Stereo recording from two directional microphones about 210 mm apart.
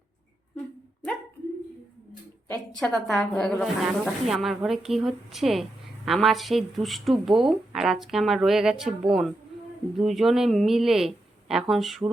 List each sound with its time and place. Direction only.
2.5 s speech: 5° left (ahead or behind)